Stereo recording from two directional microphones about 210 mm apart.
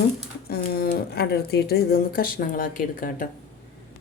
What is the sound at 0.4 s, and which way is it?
Speech, 45° left (ahead or behind).